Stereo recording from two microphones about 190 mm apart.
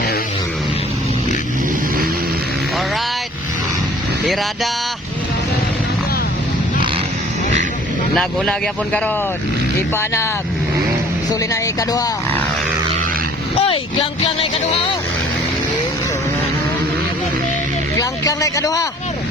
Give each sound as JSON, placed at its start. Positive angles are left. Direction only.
{"t": 8.1, "sound": "a man's voice", "side_deg": 5}
{"t": 11.3, "sound": "speech", "side_deg": 20}
{"t": 13.6, "sound": "a sound", "side_deg": 30}
{"t": 17.9, "sound": "a man's voice", "side_deg": 20}